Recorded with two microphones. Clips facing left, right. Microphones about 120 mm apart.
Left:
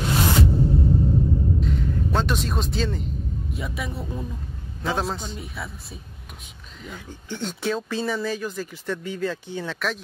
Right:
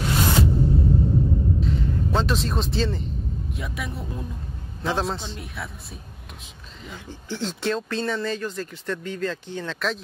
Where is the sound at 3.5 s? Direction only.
Centre (ahead or behind).